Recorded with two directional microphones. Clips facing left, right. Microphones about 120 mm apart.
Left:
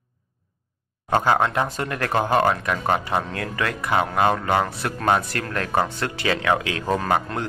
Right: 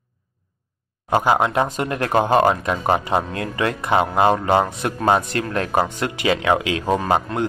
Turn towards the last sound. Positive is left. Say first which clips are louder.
# right 3 dB
turn(degrees=-20)  # may be behind; listen again after turning